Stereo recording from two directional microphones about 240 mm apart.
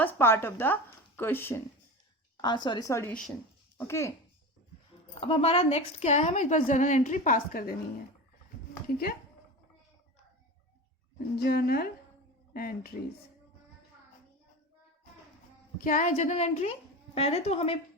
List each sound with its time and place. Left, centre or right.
0.0 s a woman's voice: centre
5.2 s a woman's voice: left
11.4 s a woman's voice: left
15.8 s a woman's voice: left